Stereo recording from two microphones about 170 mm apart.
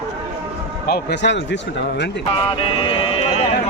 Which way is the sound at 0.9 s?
85° left.